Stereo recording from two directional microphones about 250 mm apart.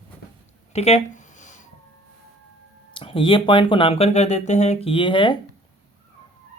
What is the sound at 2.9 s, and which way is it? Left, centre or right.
Speech, left.